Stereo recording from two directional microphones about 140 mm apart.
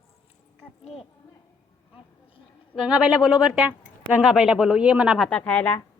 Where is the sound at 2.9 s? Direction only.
5° right (ahead or behind).